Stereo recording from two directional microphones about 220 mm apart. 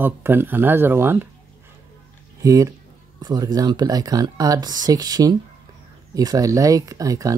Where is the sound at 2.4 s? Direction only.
15° right (ahead or behind).